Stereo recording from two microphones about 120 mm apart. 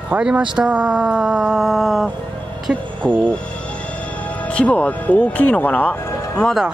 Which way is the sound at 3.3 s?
10° left (ahead or behind).